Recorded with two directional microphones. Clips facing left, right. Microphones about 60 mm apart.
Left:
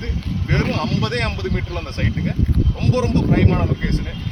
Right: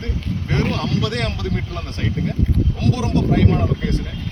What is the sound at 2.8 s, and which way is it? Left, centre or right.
Speech, left.